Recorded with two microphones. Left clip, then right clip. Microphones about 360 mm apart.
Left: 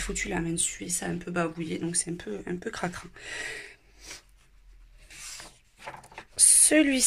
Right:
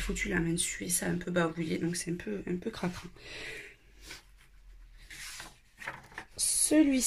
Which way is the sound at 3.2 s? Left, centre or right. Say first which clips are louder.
Left 8 dB; centre.